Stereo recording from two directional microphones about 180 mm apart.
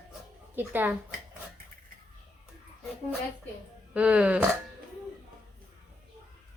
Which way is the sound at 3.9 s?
5° right (ahead or behind).